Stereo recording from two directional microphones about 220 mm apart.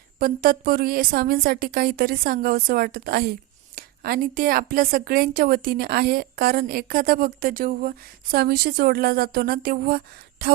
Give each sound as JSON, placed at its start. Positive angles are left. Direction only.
{"t": 0.2, "sound": "a woman's voice", "side_deg": -40}